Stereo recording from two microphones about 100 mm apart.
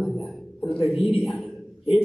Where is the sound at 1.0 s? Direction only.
85° left.